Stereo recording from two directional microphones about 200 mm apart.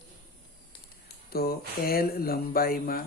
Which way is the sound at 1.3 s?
50° left (ahead or behind).